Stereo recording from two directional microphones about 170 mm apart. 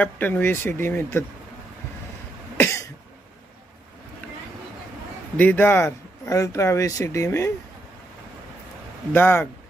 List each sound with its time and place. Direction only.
0.0 s speech: 10° left (ahead or behind)
2.5 s cough: 15° left (ahead or behind)
5.4 s speech: 10° left (ahead or behind)
9.1 s speech: 15° left (ahead or behind)